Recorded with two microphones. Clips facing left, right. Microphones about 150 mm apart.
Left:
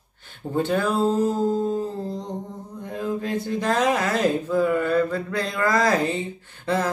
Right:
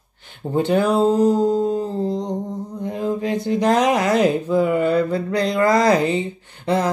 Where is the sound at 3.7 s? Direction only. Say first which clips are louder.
Right 5 dB; 15° right (ahead or behind).